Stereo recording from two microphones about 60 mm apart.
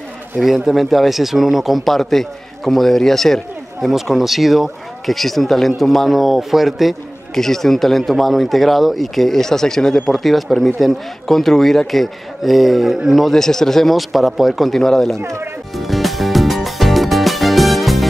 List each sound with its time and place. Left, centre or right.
0.7 s speech: centre
15.1 s speech: right
15.7 s music: centre